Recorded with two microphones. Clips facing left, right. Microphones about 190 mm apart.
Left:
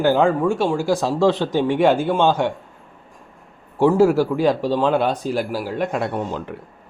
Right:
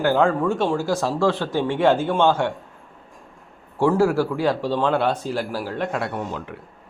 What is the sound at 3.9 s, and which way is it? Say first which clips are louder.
Speech: left 4 dB; 20° left (ahead or behind).